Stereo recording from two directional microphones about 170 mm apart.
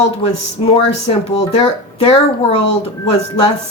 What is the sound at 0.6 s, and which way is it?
Speech, 35° left (ahead or behind).